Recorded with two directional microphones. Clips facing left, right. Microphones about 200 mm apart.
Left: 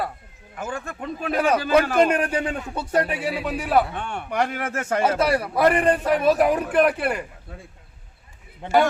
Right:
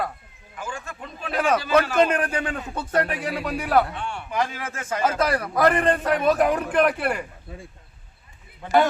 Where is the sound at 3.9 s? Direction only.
55° left (ahead or behind).